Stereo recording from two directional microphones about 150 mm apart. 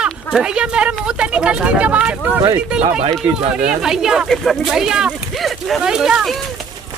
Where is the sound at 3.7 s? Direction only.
5° right (ahead or behind).